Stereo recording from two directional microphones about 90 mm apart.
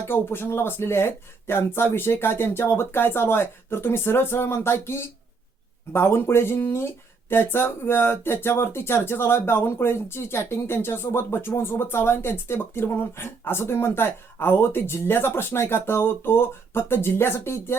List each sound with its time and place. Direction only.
0.1 s speech: 25° left (ahead or behind)